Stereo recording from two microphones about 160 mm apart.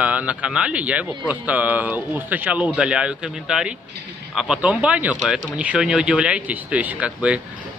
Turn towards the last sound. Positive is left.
turn(degrees=-5)  # may be behind; listen again after turning